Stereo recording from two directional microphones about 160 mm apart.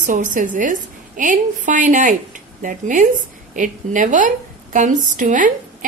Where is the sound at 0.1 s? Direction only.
55° right (ahead or behind).